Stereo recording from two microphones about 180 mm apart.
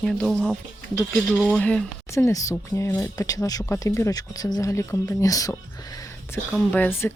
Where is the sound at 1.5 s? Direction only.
5° left (ahead or behind).